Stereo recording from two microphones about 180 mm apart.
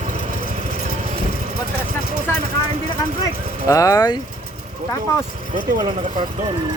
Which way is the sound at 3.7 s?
20° left (ahead or behind).